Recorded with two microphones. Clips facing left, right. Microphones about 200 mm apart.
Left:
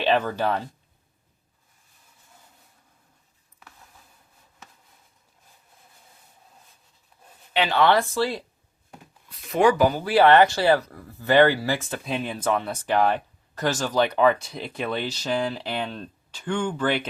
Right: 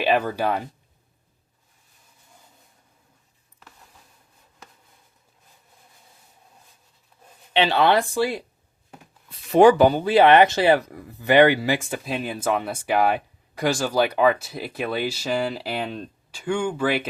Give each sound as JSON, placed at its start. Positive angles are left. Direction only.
{"t": 0.0, "sound": "speech", "side_deg": -10}
{"t": 7.5, "sound": "speech", "side_deg": -25}
{"t": 9.3, "sound": "speech", "side_deg": -30}